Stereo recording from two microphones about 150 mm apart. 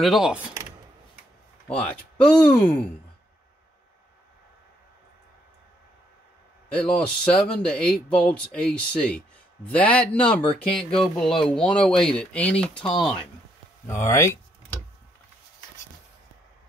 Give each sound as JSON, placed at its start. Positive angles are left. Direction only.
{"t": 0.0, "sound": "speech", "side_deg": 0}
{"t": 1.7, "sound": "speech", "side_deg": 5}
{"t": 6.7, "sound": "speech", "side_deg": 5}
{"t": 14.0, "sound": "speech", "side_deg": 20}